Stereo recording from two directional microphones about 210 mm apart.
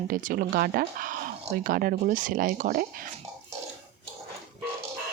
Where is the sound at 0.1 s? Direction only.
40° right (ahead or behind).